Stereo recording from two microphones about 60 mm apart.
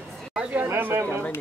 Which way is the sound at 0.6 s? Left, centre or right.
Right.